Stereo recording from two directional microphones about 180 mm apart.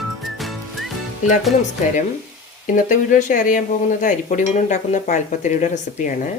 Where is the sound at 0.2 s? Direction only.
Centre (ahead or behind).